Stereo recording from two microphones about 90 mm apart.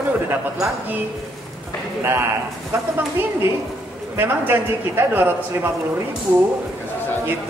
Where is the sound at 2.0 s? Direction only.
25° right (ahead or behind).